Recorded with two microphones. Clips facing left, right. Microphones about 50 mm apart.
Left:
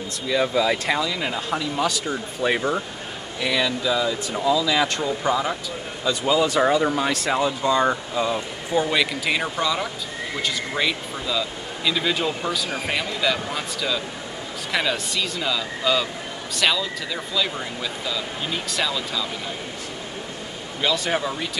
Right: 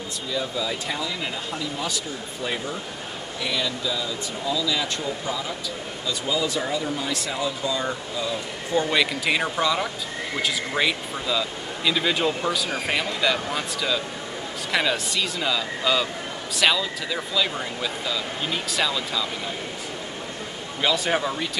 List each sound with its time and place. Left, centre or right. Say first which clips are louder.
0.3 s speech: left 8 dB; left
8.8 s speech: even; centre
20.8 s speech: even; centre